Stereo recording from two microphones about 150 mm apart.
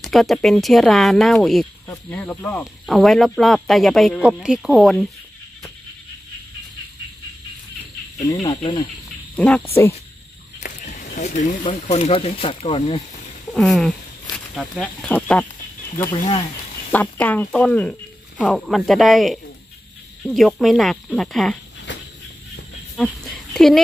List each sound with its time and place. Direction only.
0.0 s speech: centre (ahead or behind)
8.5 s speech: 30° left (ahead or behind)
9.3 s speech: 10° left (ahead or behind)
10.6 s speech: 55° left (ahead or behind)
13.6 s speech: centre (ahead or behind)
16.9 s speech: 10° left (ahead or behind)
22.9 s a sound: centre (ahead or behind)